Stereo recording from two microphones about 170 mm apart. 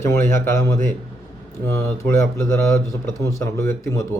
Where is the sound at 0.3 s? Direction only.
15° left (ahead or behind).